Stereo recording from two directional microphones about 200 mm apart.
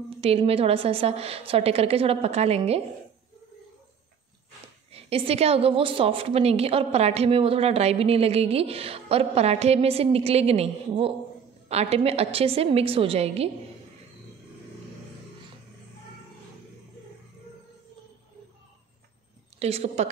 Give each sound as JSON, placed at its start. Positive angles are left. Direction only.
{"t": 0.2, "sound": "a woman's voice", "side_deg": -30}
{"t": 4.9, "sound": "a woman's voice", "side_deg": -30}
{"t": 19.6, "sound": "a woman's voice", "side_deg": -30}